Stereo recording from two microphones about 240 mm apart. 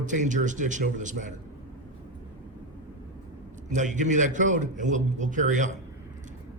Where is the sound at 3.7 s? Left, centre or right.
Right.